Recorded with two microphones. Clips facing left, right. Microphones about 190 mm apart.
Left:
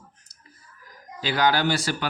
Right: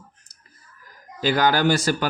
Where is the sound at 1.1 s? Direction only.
45° right (ahead or behind).